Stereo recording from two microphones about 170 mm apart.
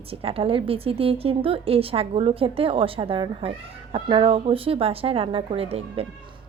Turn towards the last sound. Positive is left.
turn(degrees=-35)  # may be behind; listen again after turning